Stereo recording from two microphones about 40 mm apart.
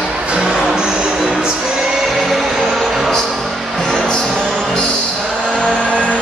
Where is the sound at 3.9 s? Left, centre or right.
Centre.